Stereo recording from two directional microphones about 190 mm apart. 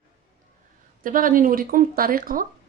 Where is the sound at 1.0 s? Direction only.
45° right (ahead or behind).